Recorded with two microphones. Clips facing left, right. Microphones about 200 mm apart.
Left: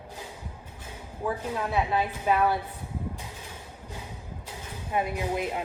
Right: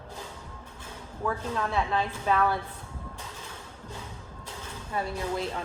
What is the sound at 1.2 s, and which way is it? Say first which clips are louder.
A woman's voice: even; 15° left (ahead or behind).